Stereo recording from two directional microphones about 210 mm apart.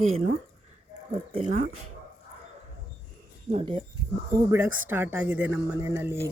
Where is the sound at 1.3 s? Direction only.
30° right (ahead or behind).